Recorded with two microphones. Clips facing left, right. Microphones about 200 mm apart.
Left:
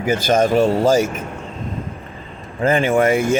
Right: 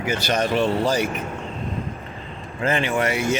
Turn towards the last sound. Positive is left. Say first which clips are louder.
# left 6 dB
turn(degrees=50)  # may be behind; listen again after turning